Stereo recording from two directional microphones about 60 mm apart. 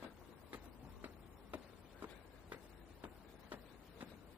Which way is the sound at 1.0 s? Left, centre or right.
Right.